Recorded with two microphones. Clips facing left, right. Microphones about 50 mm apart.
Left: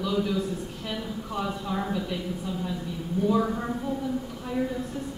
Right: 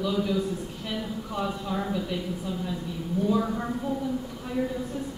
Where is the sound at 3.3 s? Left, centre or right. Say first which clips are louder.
Left 2 dB; centre.